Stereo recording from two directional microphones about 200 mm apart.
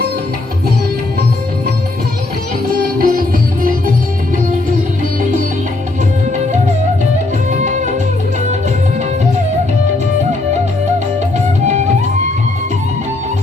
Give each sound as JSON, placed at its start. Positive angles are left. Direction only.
{"t": 2.7, "sound": "music", "side_deg": -45}
{"t": 7.6, "sound": "music", "side_deg": -35}